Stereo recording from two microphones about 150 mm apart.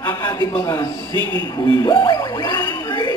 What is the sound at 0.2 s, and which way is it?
Speech, 30° left (ahead or behind).